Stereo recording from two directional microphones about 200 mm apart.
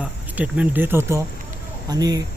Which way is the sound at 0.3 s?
5° right (ahead or behind).